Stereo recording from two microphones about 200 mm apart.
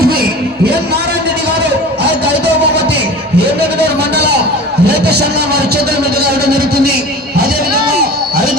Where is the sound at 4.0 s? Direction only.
55° right (ahead or behind).